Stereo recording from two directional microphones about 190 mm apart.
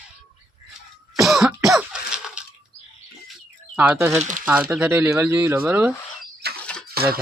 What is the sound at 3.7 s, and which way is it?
Speech, 5° right (ahead or behind).